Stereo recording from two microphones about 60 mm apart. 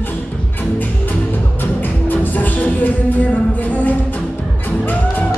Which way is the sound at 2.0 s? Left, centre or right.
Left.